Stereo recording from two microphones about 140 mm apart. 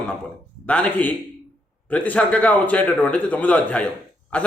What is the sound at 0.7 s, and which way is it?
A man's voice, 10° left (ahead or behind).